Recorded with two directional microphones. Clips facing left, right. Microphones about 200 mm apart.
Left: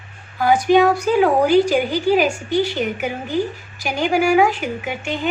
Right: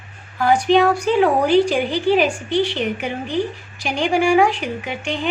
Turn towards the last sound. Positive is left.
turn(degrees=5)  # may be behind; listen again after turning